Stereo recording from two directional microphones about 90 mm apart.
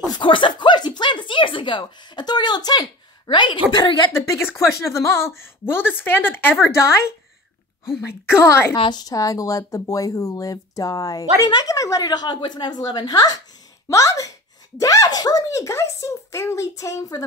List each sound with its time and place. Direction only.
0.2 s speech: 65° left (ahead or behind); by 2.9 s 50° left (ahead or behind)
3.3 s a woman's voice: 60° left (ahead or behind)
4.4 s a woman's voice: 30° left (ahead or behind)
8.1 s a woman's voice: 25° left (ahead or behind)
8.9 s a woman's voice: 45° left (ahead or behind)